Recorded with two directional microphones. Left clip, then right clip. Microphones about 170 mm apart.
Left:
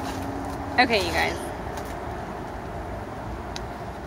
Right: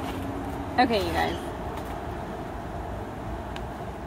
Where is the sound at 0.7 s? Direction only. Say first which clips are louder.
Left 2 dB; 50° right (ahead or behind).